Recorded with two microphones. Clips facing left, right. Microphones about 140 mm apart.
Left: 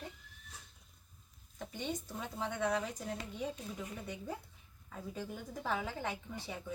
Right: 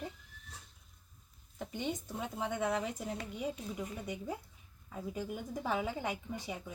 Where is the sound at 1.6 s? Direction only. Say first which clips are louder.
Right 2 dB; 15° right (ahead or behind).